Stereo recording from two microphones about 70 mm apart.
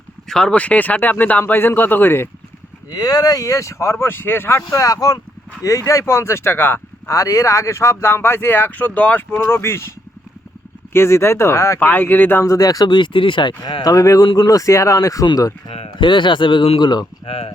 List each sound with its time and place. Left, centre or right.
0.3 s speech: centre
0.5 s speech: left
2.9 s speech: left
4.8 s speech: left
7.1 s speech: left
9.4 s speech: left
10.9 s speech: left
11.8 s speech: left
12.5 s speech: left
13.9 s speech: left
15.3 s speech: left
16.8 s speech: left